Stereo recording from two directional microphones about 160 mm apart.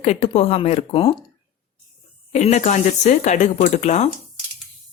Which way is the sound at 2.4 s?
45° left (ahead or behind).